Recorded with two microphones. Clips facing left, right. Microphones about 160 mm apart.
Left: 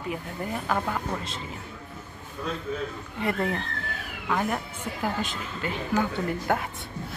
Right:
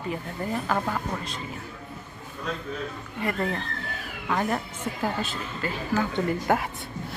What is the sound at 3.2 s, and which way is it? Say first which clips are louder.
Speech: left 1 dB; 15° left (ahead or behind).